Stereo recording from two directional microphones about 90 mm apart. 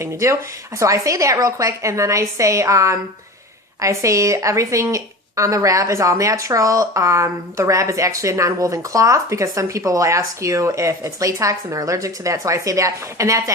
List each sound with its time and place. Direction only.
0.0 s speech: 35° right (ahead or behind)